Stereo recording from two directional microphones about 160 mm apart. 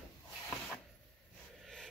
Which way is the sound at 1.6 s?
5° left (ahead or behind).